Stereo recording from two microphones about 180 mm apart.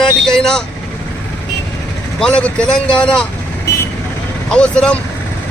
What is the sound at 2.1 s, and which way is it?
Speech, 5° left (ahead or behind).